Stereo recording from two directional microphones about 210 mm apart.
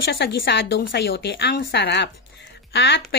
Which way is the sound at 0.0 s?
50° left (ahead or behind).